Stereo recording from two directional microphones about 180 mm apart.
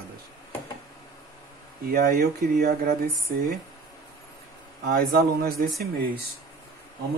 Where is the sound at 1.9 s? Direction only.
55° right (ahead or behind).